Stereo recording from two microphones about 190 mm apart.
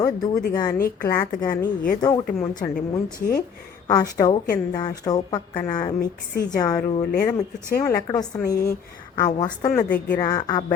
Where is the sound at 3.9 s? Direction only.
20° left (ahead or behind).